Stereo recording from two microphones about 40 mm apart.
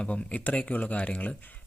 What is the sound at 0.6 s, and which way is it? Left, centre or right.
Speech, left.